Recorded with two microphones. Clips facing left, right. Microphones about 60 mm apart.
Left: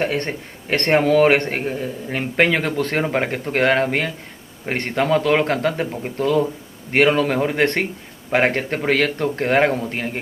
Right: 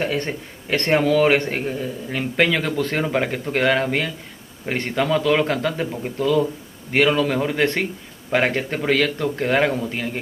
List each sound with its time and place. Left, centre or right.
0.0 s a man's voice: left